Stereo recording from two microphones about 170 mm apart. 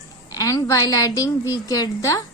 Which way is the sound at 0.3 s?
20° left (ahead or behind).